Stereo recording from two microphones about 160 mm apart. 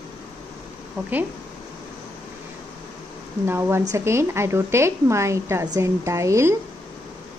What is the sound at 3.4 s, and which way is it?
A woman's voice, 15° right (ahead or behind).